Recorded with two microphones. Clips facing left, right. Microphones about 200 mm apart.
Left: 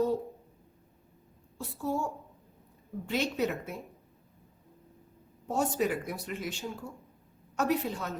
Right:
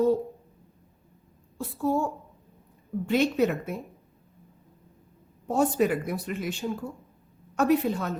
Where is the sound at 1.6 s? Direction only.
55° right (ahead or behind).